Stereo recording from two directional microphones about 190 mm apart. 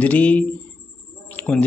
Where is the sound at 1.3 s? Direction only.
10° left (ahead or behind).